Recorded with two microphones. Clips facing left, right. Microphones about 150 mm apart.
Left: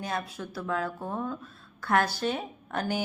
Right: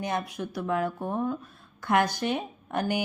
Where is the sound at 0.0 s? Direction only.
15° right (ahead or behind).